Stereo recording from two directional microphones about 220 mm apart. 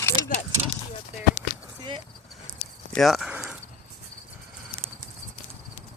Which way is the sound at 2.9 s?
Centre (ahead or behind).